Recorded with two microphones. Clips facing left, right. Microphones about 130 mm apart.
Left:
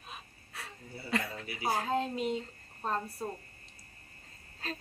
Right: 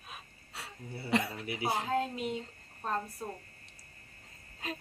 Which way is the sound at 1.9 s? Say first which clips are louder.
Left 1 dB; 5° right (ahead or behind).